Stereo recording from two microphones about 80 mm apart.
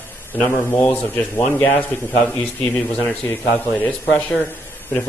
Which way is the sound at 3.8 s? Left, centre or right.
Left.